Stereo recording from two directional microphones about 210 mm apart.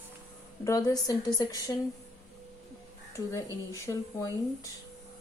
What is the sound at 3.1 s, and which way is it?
A woman's voice, 15° left (ahead or behind).